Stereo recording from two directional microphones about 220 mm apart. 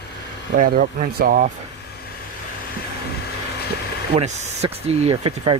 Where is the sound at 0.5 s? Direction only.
40° right (ahead or behind).